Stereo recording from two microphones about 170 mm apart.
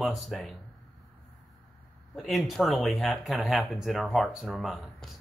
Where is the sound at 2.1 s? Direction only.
Centre (ahead or behind).